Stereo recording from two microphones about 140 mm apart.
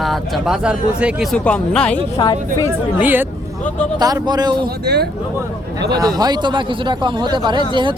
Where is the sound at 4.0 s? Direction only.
25° right (ahead or behind).